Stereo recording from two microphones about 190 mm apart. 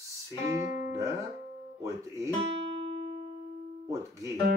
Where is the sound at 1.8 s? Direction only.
15° right (ahead or behind).